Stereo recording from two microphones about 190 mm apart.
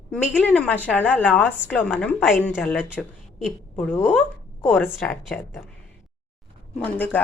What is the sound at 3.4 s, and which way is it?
Speech, 10° left (ahead or behind).